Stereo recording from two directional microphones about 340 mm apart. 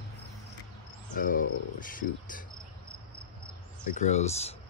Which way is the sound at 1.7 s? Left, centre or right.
Left.